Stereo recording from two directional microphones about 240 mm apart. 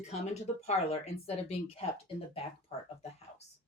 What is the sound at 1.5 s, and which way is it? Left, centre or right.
Speech, left.